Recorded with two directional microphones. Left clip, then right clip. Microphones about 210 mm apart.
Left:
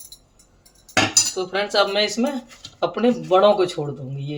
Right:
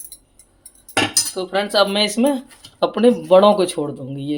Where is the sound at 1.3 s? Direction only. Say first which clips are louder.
Right 2 dB; 45° right (ahead or behind).